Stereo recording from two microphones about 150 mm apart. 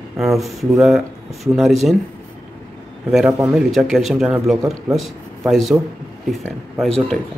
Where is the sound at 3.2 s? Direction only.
15° right (ahead or behind).